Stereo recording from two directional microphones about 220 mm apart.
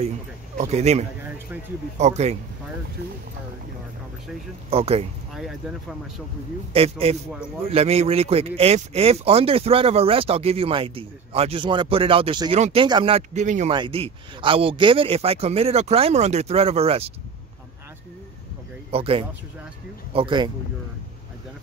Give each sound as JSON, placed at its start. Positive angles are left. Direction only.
{"t": 0.6, "sound": "speech", "side_deg": -30}
{"t": 4.6, "sound": "speech", "side_deg": -25}
{"t": 5.3, "sound": "speech", "side_deg": 0}
{"t": 6.7, "sound": "speech", "side_deg": -25}
{"t": 13.7, "sound": "speech", "side_deg": -20}
{"t": 18.9, "sound": "speech", "side_deg": -25}